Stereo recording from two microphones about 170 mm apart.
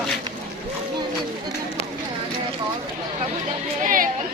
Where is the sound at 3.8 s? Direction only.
50° right (ahead or behind).